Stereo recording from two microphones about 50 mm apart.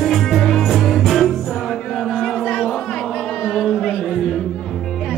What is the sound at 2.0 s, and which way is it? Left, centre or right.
Crowd, centre.